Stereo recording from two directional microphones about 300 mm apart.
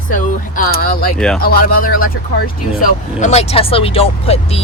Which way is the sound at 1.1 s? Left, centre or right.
Centre.